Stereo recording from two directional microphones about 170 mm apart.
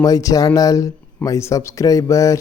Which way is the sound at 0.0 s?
20° left (ahead or behind).